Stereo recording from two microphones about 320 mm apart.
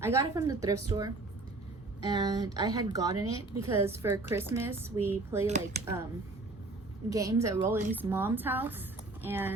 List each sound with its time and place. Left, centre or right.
0.0 s a woman's voice: centre
5.5 s speech: right
7.1 s a woman's voice: centre